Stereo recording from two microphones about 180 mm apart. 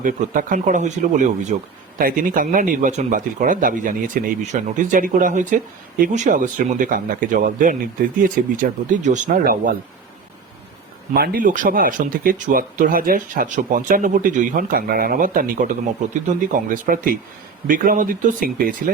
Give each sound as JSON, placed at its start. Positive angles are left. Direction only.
{"t": 0.0, "sound": "speech", "side_deg": -50}
{"t": 11.1, "sound": "speech", "side_deg": -55}